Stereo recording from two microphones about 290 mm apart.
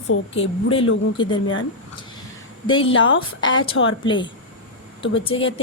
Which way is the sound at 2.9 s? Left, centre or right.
Left.